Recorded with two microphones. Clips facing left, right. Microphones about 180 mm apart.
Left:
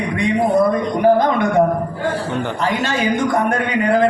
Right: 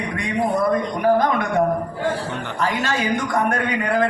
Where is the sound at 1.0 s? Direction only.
25° left (ahead or behind).